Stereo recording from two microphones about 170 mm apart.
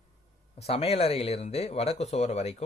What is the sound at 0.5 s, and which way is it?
Speech, 35° left (ahead or behind).